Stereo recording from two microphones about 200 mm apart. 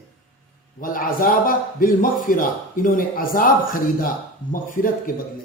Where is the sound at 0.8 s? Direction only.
45° left (ahead or behind).